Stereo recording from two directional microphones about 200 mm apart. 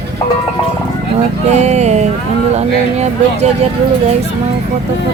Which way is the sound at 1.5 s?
35° right (ahead or behind).